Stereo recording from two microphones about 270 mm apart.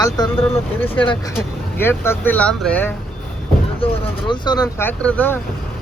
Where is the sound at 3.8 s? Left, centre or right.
Centre.